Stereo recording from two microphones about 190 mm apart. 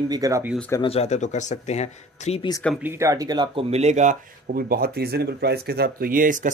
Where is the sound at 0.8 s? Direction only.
30° left (ahead or behind).